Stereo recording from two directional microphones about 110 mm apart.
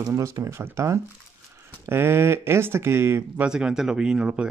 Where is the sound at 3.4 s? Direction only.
10° right (ahead or behind).